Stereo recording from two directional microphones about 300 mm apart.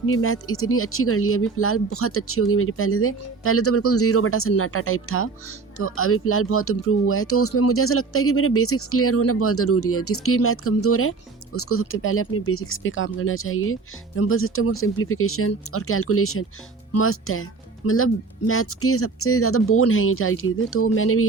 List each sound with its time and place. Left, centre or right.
0.0 s speech: left